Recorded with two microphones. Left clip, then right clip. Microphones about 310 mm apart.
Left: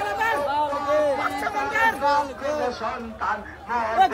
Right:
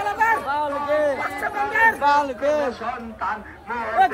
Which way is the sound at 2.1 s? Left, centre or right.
Right.